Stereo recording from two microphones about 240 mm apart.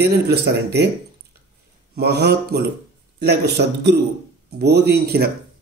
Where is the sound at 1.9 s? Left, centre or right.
Right.